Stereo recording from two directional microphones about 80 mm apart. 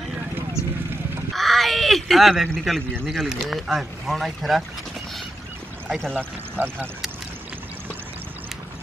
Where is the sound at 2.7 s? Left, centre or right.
Centre.